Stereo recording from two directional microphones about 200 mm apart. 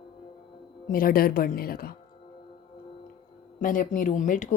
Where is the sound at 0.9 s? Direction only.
45° left (ahead or behind).